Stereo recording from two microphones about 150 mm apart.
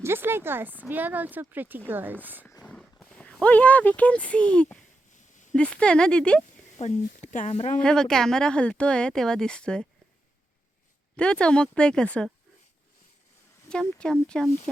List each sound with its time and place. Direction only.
0.0 s speech: 15° right (ahead or behind)
2.6 s a sound: 5° left (ahead or behind)
3.4 s speech: 10° left (ahead or behind)
6.7 s speech: 50° left (ahead or behind)
7.8 s speech: 5° left (ahead or behind)
11.2 s speech: 5° left (ahead or behind)
13.7 s speech: 5° left (ahead or behind)